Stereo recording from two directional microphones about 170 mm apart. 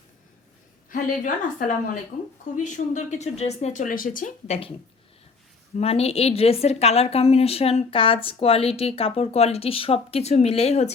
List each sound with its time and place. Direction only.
0.9 s speech: 50° left (ahead or behind)
4.4 s a woman's voice: 35° left (ahead or behind)
5.7 s a woman's voice: 35° left (ahead or behind)